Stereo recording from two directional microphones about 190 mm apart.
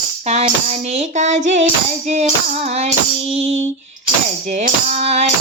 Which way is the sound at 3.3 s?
35° right (ahead or behind).